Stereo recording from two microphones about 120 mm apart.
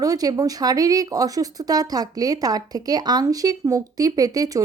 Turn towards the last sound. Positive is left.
turn(degrees=-30)  # may be behind; listen again after turning